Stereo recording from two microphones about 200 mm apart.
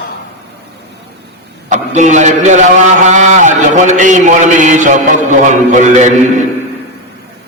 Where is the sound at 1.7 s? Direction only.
40° right (ahead or behind).